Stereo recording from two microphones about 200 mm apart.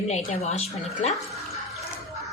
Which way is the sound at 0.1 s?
35° left (ahead or behind).